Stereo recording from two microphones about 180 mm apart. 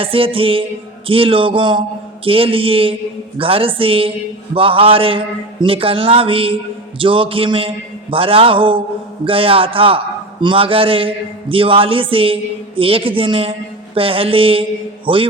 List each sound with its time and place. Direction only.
0.0 s a man's voice: 30° right (ahead or behind)